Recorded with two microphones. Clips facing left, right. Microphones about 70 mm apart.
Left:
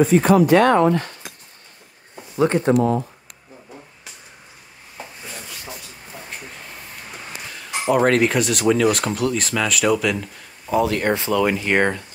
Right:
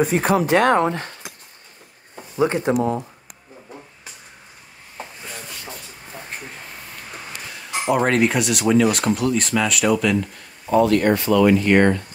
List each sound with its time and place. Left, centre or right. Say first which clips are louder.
0.4 s speech: left 2 dB; right
2.3 s speech: left 2 dB; centre
7.5 s speech: left 1 dB; centre